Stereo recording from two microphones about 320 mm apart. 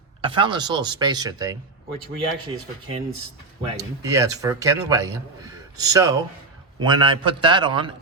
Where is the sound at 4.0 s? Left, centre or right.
Centre.